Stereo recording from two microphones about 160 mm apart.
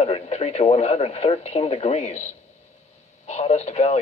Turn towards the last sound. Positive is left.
turn(degrees=45)  # may be behind; listen again after turning